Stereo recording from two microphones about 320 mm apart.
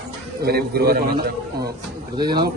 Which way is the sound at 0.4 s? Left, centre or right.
Right.